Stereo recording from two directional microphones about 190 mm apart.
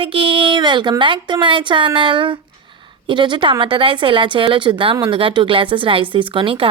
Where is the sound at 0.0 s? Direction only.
25° right (ahead or behind).